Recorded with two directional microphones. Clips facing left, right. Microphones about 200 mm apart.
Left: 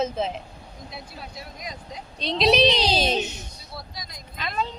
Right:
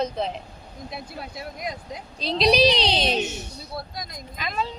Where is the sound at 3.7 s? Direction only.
50° right (ahead or behind).